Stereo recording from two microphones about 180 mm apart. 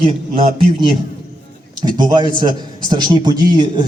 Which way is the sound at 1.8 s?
25° right (ahead or behind).